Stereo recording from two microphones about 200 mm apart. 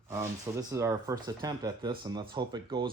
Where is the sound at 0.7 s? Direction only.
15° right (ahead or behind).